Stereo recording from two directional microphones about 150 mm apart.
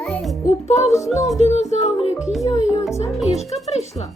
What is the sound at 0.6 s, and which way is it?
Music, 45° left (ahead or behind).